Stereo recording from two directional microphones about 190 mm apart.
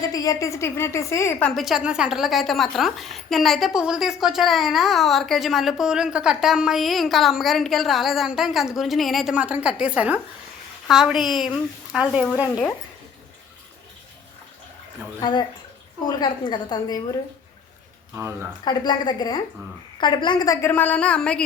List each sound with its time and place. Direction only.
0.1 s a woman's voice: 20° left (ahead or behind); by 12.3 s 5° right (ahead or behind)
15.2 s a woman's voice: 25° left (ahead or behind)
18.6 s a woman's voice: 20° left (ahead or behind); by 21.4 s 5° left (ahead or behind)